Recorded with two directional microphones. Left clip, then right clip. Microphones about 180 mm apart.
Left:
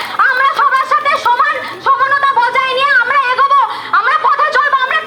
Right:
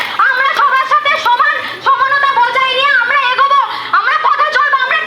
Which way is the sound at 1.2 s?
30° left (ahead or behind).